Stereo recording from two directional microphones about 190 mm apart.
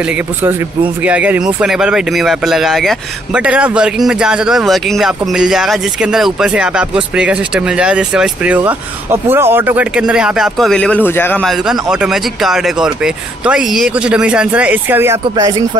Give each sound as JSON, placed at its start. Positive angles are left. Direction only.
{"t": 1.0, "sound": "speech", "side_deg": -5}